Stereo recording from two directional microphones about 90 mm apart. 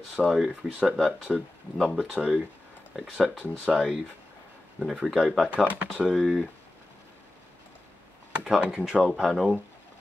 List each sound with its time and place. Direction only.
0.1 s speech: 10° right (ahead or behind)
5.5 s speech: 15° right (ahead or behind)
8.5 s speech: 10° right (ahead or behind)